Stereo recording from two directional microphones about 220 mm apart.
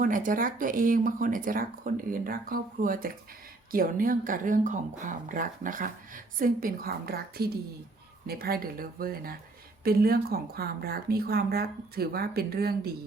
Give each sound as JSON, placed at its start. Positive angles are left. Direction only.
{"t": 0.0, "sound": "speech", "side_deg": -40}